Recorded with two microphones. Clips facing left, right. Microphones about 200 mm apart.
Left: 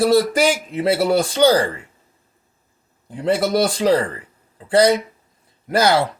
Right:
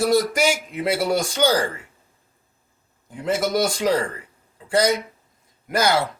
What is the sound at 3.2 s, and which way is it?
Speech, 30° left (ahead or behind).